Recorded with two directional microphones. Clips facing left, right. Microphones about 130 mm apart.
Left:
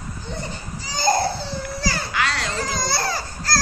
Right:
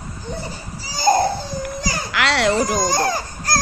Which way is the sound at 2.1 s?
80° right.